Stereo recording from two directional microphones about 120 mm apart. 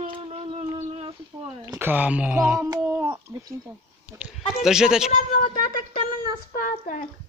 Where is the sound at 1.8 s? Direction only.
15° right (ahead or behind).